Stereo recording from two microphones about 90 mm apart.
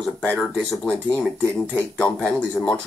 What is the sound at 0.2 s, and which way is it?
Speech, 15° left (ahead or behind).